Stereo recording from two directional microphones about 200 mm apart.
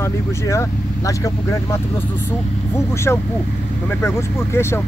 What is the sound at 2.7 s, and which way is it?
Speech, 15° left (ahead or behind).